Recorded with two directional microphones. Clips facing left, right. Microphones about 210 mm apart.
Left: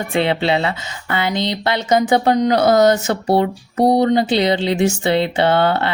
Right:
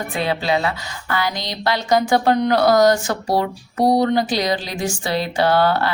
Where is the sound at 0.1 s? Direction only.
25° left (ahead or behind).